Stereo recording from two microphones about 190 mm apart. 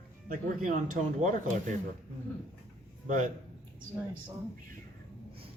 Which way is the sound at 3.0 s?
40° right (ahead or behind).